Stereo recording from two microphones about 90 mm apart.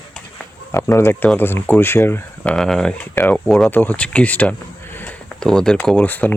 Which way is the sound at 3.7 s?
20° left (ahead or behind).